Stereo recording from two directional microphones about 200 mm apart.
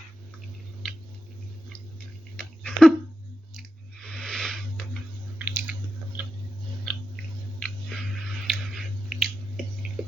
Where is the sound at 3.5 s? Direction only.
Centre (ahead or behind).